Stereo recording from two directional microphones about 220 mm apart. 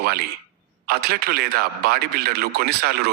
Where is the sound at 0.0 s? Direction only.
45° right (ahead or behind).